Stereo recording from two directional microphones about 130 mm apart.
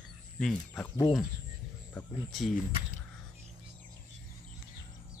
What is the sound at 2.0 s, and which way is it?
Speech, 10° left (ahead or behind).